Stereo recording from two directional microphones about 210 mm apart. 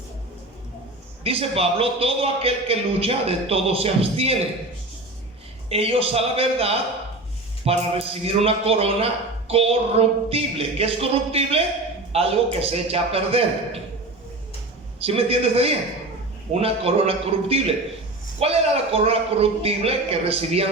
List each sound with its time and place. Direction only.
1.2 s a man's voice: 25° right (ahead or behind)
5.6 s a man's voice: 30° right (ahead or behind)
14.9 s a man's voice: 25° right (ahead or behind)